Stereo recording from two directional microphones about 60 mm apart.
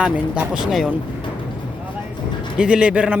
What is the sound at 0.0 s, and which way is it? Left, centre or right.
Speech, centre.